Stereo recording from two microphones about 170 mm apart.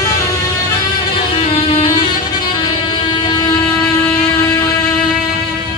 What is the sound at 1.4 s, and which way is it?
Music, 40° left (ahead or behind).